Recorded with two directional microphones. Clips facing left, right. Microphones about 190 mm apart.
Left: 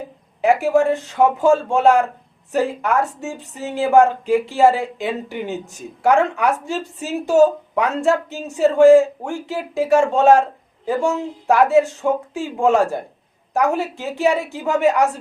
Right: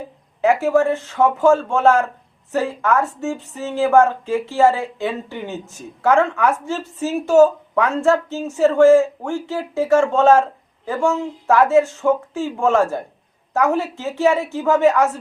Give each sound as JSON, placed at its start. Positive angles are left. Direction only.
{"t": 0.4, "sound": "a woman's voice", "side_deg": 15}